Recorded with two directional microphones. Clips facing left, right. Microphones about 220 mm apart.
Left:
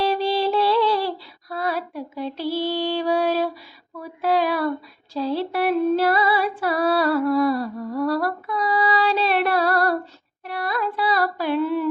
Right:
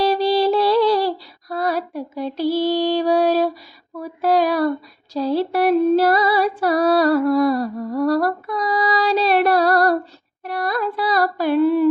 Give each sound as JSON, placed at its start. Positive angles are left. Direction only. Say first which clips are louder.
{"t": 0.0, "sound": "a sound", "louder": "right 4 dB", "side_deg": -40}
{"t": 4.0, "sound": "female singing", "louder": "right 4 dB", "side_deg": -40}
{"t": 10.4, "sound": "carnatic music", "louder": "right 3 dB", "side_deg": -40}